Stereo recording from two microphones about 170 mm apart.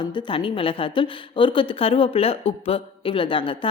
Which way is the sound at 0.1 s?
30° left (ahead or behind).